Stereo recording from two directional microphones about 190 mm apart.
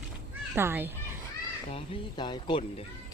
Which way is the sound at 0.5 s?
10° right (ahead or behind).